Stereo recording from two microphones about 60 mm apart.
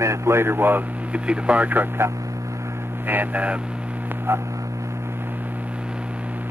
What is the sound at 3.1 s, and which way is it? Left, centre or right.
Speech, right.